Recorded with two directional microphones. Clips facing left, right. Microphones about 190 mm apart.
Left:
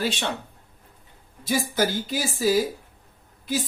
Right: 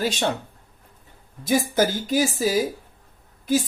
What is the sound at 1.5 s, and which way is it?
Speech, 45° right (ahead or behind).